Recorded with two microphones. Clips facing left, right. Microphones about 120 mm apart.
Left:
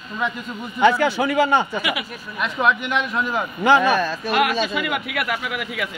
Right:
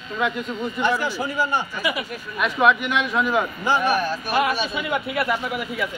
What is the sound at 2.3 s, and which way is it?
A man's voice, 5° right (ahead or behind).